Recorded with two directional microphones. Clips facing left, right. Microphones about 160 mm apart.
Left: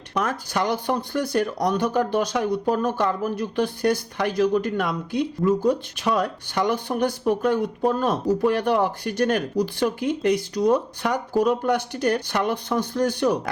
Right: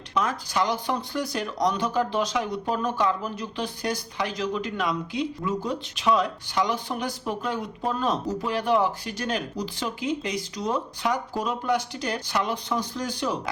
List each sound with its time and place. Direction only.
0.1 s speech: 55° left (ahead or behind)